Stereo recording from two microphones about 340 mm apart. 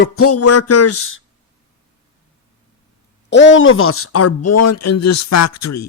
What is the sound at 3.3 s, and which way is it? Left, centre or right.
A man's voice, left.